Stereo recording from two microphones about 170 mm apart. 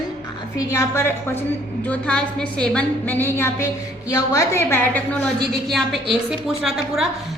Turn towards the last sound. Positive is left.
turn(degrees=0)  # may be behind; listen again after turning